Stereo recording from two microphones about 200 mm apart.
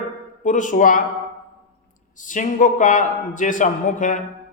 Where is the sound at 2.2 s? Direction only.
40° left (ahead or behind).